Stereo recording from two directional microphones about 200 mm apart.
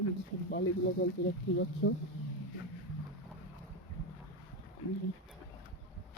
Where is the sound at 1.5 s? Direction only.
80° left.